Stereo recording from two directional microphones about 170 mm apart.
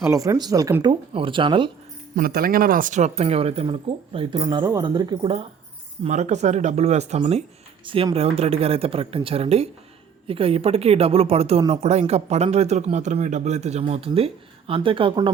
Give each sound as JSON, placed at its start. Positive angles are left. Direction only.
{"t": 0.0, "sound": "speech", "side_deg": -15}
{"t": 2.1, "sound": "speech", "side_deg": -60}